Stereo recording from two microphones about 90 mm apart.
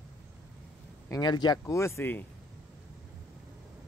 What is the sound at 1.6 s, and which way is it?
Speech, 35° left (ahead or behind).